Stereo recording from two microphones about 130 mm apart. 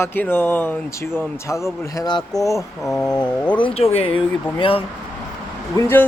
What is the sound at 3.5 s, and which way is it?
Speech, 45° left (ahead or behind).